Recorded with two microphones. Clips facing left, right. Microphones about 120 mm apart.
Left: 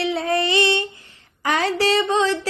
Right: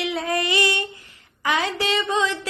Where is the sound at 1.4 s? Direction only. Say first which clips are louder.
Left 4 dB; 40° left (ahead or behind).